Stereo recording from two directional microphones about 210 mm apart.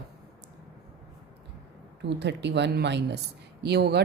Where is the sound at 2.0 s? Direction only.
55° right (ahead or behind).